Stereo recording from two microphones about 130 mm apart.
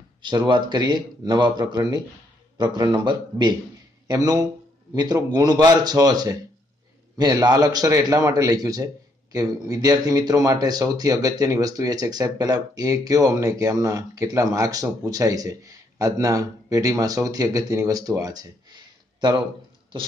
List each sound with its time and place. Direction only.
0.2 s speech: 35° right (ahead or behind)